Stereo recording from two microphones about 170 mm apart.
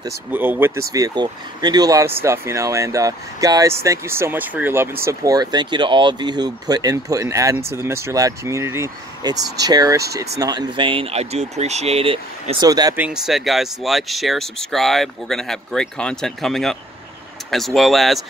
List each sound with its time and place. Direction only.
0.0 s speech: 10° right (ahead or behind)
12.9 s speech: 5° right (ahead or behind)